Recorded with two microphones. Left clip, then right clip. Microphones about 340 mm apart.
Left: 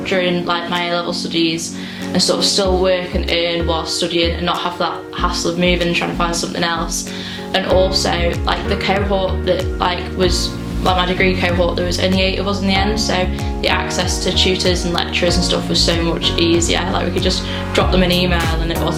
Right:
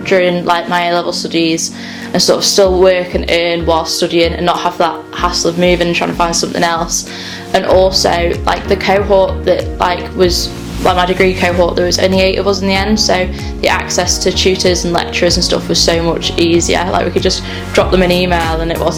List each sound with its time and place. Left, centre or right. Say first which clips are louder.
0.1 s a woman's voice: right 7 dB; right
2.1 s music: right 6 dB; right
5.5 s a woman's voice: right 4 dB; right